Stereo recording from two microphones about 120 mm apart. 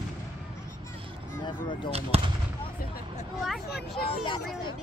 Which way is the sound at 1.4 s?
40° left (ahead or behind).